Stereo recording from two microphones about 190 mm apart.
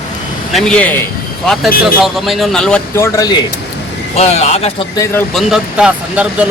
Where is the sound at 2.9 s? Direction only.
15° left (ahead or behind).